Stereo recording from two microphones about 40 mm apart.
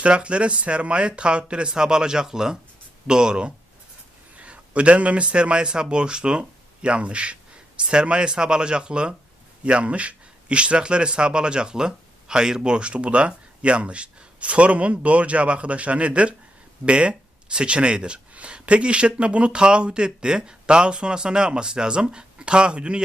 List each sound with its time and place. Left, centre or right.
0.0 s a man's voice: right